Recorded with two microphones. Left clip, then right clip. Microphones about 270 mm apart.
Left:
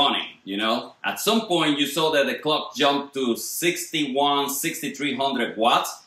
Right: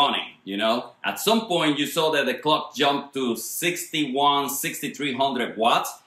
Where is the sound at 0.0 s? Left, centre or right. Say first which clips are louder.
Even; centre.